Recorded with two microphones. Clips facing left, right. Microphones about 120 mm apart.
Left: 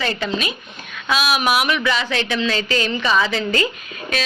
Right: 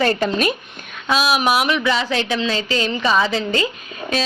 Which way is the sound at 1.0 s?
30° right (ahead or behind).